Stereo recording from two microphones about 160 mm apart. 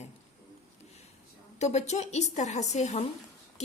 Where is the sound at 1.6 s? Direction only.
45° left (ahead or behind).